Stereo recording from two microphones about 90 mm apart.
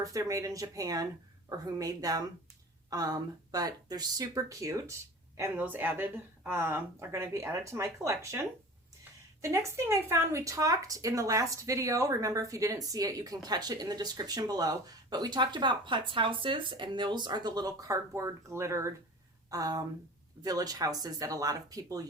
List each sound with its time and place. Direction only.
0.0 s speech: 40° right (ahead or behind)
5.5 s speech: 20° right (ahead or behind); by 22.0 s 40° right (ahead or behind)